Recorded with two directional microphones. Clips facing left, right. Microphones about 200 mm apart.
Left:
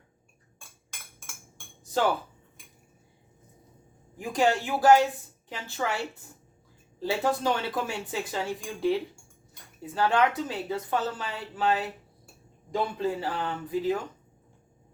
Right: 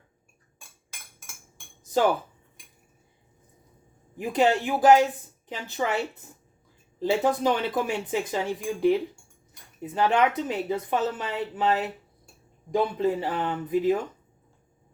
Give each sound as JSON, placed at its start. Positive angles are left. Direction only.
{"t": 4.2, "sound": "speech", "side_deg": -20}